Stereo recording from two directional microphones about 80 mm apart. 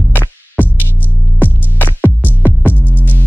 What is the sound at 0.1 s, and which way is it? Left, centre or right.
Music, left.